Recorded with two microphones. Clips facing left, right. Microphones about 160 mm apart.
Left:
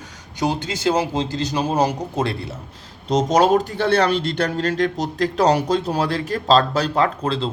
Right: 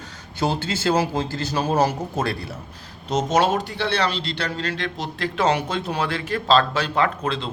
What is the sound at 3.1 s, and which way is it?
Speech, 35° left (ahead or behind).